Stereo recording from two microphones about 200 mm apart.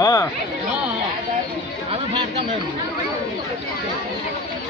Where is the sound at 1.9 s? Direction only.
30° right (ahead or behind).